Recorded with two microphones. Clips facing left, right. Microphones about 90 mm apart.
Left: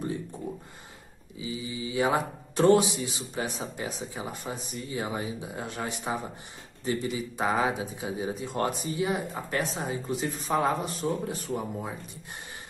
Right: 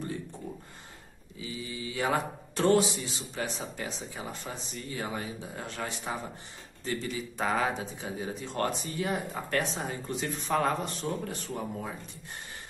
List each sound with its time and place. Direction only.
1.4 s speech: 15° left (ahead or behind)